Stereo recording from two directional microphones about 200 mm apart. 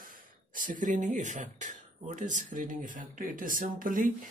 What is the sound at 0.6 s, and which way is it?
Speech, 40° right (ahead or behind).